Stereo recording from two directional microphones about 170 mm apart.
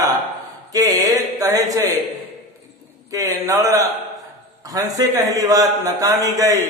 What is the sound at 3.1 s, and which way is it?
A man's voice, 20° right (ahead or behind).